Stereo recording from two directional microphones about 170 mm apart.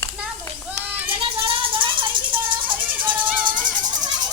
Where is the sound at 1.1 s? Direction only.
30° right (ahead or behind).